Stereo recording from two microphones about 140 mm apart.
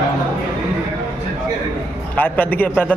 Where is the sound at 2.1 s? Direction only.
15° left (ahead or behind).